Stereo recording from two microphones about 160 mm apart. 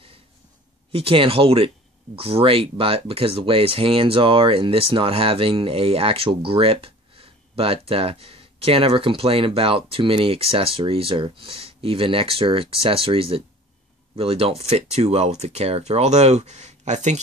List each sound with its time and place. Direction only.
0.9 s speech: 35° right (ahead or behind)